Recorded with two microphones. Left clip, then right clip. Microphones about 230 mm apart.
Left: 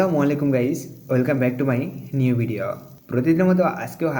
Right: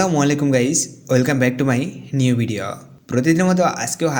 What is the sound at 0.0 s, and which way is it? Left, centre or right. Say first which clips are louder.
Speech: right 2 dB; right.